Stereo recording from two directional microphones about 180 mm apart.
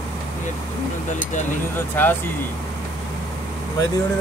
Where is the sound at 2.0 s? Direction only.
10° left (ahead or behind).